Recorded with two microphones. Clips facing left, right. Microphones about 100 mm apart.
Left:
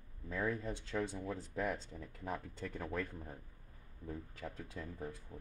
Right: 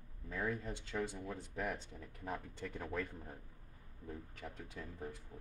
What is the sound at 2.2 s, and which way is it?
Speech, 5° right (ahead or behind).